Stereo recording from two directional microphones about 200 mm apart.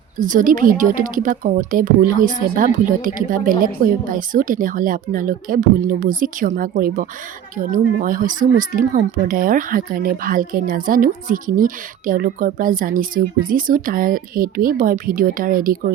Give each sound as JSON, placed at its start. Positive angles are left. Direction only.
{"t": 0.2, "sound": "speech", "side_deg": -40}